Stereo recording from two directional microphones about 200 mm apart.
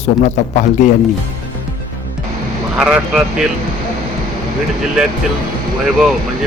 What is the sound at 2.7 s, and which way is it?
Speech, 5° right (ahead or behind).